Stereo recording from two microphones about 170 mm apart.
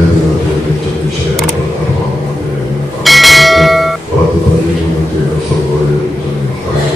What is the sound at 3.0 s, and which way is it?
Bell, centre (ahead or behind).